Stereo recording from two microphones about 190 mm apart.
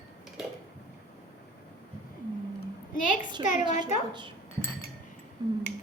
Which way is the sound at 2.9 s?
45° left (ahead or behind).